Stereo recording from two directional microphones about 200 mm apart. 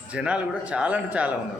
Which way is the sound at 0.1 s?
5° right (ahead or behind).